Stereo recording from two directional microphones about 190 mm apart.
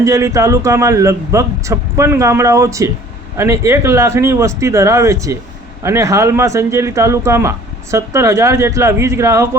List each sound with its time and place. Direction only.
0.0 s a man's voice: 15° right (ahead or behind)